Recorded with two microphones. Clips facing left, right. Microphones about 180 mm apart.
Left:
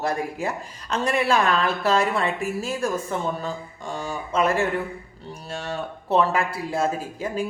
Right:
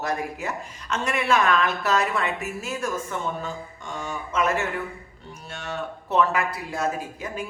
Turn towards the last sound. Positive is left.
turn(degrees=30)  # may be behind; listen again after turning